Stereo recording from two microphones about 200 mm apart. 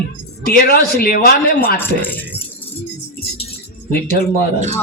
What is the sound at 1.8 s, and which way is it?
Speech, 10° left (ahead or behind).